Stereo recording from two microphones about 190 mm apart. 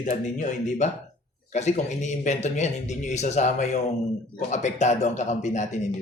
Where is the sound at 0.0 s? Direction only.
40° left (ahead or behind).